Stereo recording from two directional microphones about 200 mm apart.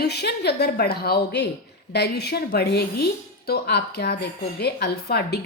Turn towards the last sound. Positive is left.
turn(degrees=55)  # may be behind; listen again after turning